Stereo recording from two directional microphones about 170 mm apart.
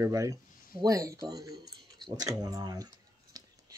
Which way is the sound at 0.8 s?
20° right (ahead or behind).